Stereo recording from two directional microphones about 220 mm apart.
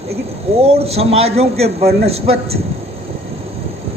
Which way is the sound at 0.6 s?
25° right (ahead or behind).